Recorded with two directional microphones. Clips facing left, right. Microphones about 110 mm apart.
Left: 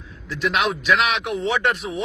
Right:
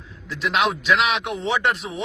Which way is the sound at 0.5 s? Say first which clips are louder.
Right 1 dB; 25° right (ahead or behind).